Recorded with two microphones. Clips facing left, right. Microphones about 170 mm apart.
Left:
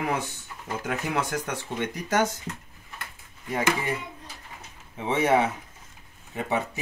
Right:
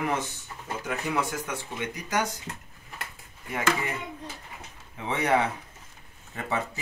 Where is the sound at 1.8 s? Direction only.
50° left (ahead or behind).